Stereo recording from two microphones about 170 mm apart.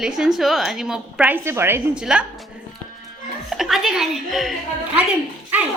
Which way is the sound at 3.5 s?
Centre (ahead or behind).